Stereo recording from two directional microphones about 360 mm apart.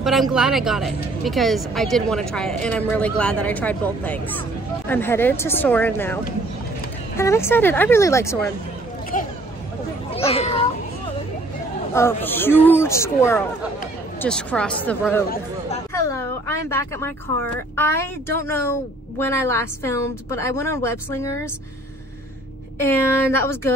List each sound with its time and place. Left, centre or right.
0.0 s speech: centre
7.2 s a woman's voice: centre
10.1 s a woman's voice: centre
11.9 s a woman's voice: centre
22.8 s a woman's voice: centre